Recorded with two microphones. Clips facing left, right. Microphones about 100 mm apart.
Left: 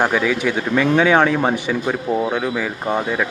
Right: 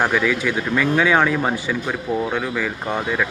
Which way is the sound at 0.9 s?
25° left (ahead or behind).